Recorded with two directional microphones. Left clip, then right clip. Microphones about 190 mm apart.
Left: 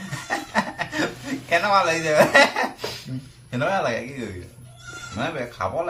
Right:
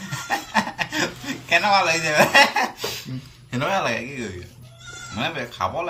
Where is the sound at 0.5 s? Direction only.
15° left (ahead or behind).